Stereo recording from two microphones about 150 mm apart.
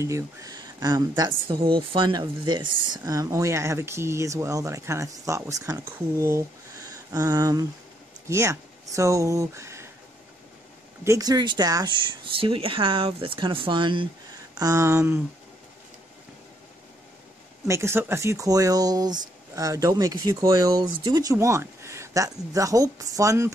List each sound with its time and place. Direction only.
0.0 s speech: 20° right (ahead or behind)
3.0 s speech: 20° right (ahead or behind)
6.9 s a sound: 25° right (ahead or behind)
8.3 s speech: 20° right (ahead or behind)
11.1 s speech: 25° right (ahead or behind)
17.6 s speech: 20° right (ahead or behind)